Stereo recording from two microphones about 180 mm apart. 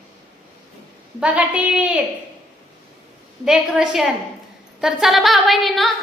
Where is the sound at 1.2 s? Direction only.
5° right (ahead or behind).